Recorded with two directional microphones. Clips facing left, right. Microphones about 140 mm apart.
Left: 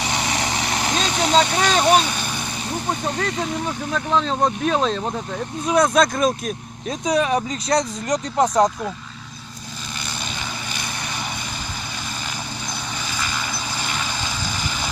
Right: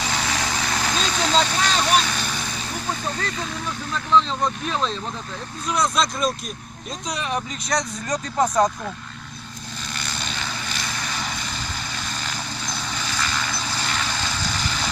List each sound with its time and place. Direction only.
0.0 s vehicle: 20° left (ahead or behind)
1.5 s speech: 55° left (ahead or behind)
1.8 s speech: 15° left (ahead or behind)
3.7 s speech: 50° left (ahead or behind)
7.7 s speech: 25° left (ahead or behind)
13.1 s vehicle: 10° left (ahead or behind)